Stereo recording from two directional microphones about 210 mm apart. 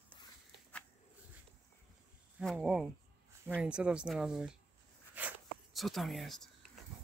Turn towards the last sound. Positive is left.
turn(degrees=0)  # may be behind; listen again after turning